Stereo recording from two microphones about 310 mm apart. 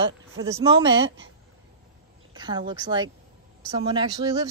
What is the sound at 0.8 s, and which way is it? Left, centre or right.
Speech, right.